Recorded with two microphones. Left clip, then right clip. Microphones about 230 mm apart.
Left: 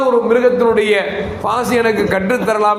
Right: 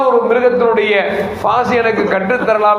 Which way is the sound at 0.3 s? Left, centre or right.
Left.